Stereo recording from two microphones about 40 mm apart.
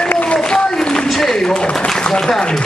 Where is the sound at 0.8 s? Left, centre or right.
Centre.